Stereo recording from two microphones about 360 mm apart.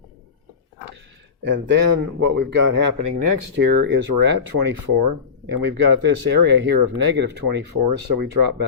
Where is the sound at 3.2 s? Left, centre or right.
Right.